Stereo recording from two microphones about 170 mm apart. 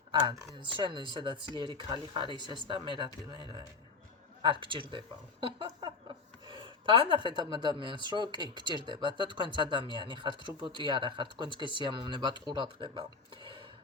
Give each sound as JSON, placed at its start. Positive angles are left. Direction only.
{"t": 0.1, "sound": "speech", "side_deg": -25}
{"t": 4.6, "sound": "speech", "side_deg": -30}